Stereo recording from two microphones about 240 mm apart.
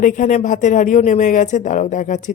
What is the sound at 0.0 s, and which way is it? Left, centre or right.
Speech, left.